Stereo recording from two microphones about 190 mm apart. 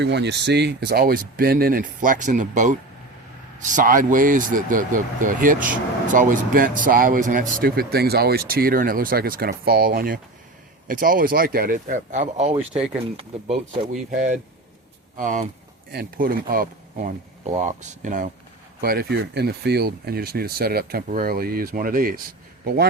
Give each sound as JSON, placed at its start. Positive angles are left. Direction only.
{"t": 0.0, "sound": "speech", "side_deg": -65}
{"t": 15.9, "sound": "speech", "side_deg": -55}
{"t": 18.8, "sound": "speech", "side_deg": -55}